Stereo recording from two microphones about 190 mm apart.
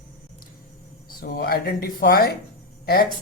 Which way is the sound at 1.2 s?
60° left (ahead or behind).